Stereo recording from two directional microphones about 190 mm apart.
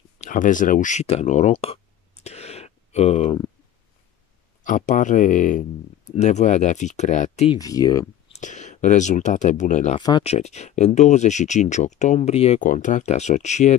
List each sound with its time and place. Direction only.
0.2 s a sound: 45° left (ahead or behind)
4.6 s speech: 40° left (ahead or behind)
7.5 s speech: 20° left (ahead or behind)
8.3 s speech: 40° left (ahead or behind)
9.9 s speech: 25° left (ahead or behind)
10.3 s speech: 35° left (ahead or behind)